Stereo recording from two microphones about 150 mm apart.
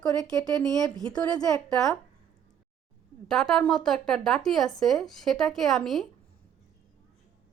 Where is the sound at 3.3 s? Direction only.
Centre (ahead or behind).